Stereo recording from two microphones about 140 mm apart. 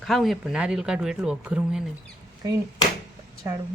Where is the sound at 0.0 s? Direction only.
Centre (ahead or behind).